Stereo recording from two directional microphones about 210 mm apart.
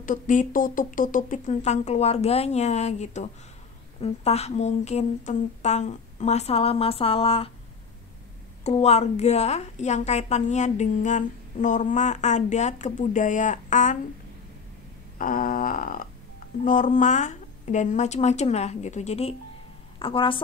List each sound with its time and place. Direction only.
0.0 s a woman's voice: 40° left (ahead or behind)
8.6 s a woman's voice: 30° left (ahead or behind)
15.1 s a woman's voice: 40° left (ahead or behind); by 20.3 s 25° left (ahead or behind)